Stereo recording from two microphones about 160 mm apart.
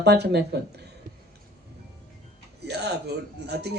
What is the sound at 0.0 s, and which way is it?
Speech, 90° right.